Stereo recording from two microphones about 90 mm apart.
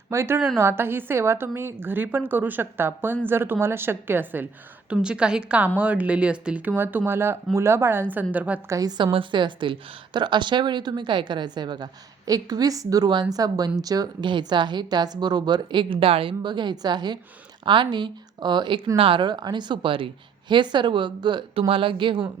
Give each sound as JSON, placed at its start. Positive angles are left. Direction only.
{"t": 0.1, "sound": "a woman's voice", "side_deg": -30}
{"t": 4.9, "sound": "speech", "side_deg": -10}
{"t": 6.7, "sound": "a woman's voice", "side_deg": -25}
{"t": 8.7, "sound": "a woman's voice", "side_deg": -45}
{"t": 9.1, "sound": "a woman's voice", "side_deg": -65}
{"t": 14.3, "sound": "speech", "side_deg": -60}
{"t": 18.9, "sound": "speech", "side_deg": -75}
{"t": 20.5, "sound": "speech", "side_deg": -60}
{"t": 21.7, "sound": "speech", "side_deg": -80}